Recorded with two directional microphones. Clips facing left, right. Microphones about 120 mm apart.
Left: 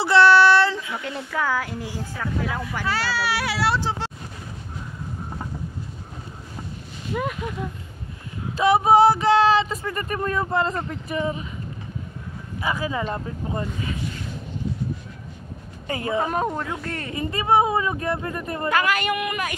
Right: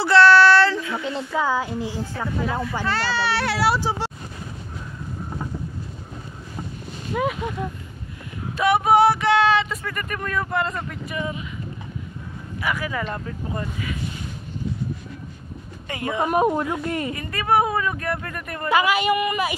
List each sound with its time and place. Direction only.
0.0 s child singing: 20° left (ahead or behind)
0.9 s a woman's voice: 20° right (ahead or behind)
2.8 s speech: 5° left (ahead or behind)
7.1 s speech: centre (ahead or behind)
8.5 s child singing: 30° left (ahead or behind)
9.8 s speech: 30° left (ahead or behind)
12.6 s speech: 25° left (ahead or behind)
15.9 s speech: 30° left (ahead or behind)
16.2 s speech: 10° right (ahead or behind)
17.1 s speech: 25° left (ahead or behind)
18.7 s speech: 10° right (ahead or behind)